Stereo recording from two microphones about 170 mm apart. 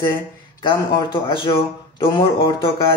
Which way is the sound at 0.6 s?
30° left (ahead or behind).